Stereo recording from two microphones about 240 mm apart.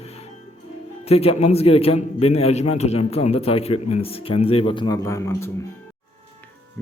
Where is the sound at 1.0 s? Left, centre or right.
Left.